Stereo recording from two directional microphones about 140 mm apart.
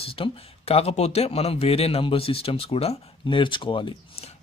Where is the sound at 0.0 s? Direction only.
40° left (ahead or behind).